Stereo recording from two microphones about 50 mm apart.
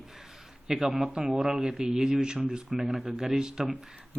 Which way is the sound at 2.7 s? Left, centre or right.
Centre.